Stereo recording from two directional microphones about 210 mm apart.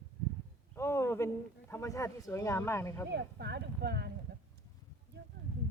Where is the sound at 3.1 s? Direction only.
55° right (ahead or behind).